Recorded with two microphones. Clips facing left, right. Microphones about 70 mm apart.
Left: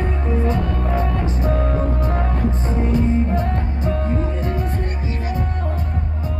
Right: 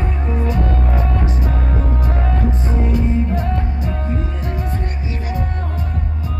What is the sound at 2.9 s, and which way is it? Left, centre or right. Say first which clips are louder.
Music: left 2 dB; left.